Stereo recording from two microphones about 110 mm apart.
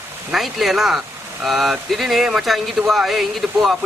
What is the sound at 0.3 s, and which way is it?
Speech, centre (ahead or behind).